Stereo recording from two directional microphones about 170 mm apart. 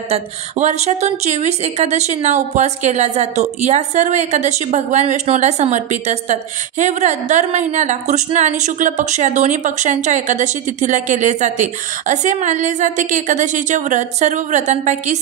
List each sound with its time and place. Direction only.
0.1 s speech: 40° right (ahead or behind)